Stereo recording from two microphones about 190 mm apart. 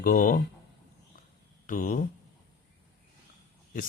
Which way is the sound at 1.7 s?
45° left (ahead or behind).